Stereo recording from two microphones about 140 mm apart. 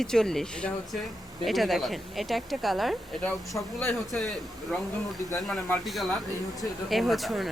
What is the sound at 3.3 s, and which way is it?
Speech, 15° left (ahead or behind).